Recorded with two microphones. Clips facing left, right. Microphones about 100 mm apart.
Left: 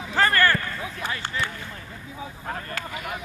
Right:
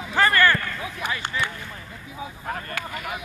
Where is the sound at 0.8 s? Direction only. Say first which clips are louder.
Right 1 dB; 15° right (ahead or behind).